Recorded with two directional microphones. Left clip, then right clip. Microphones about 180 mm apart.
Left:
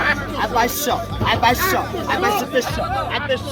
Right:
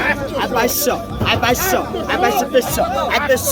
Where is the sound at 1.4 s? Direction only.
30° left (ahead or behind).